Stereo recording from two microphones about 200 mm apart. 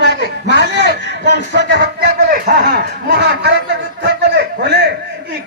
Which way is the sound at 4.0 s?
60° right (ahead or behind).